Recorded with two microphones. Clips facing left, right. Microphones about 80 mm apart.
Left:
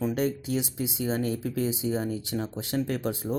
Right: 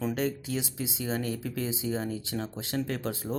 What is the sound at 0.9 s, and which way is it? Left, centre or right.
Speech, left.